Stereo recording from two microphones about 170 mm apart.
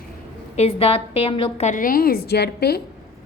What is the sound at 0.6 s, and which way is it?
A woman's voice, 35° left (ahead or behind).